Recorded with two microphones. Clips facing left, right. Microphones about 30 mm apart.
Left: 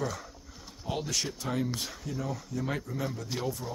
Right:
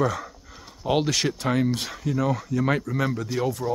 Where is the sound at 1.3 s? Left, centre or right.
Right.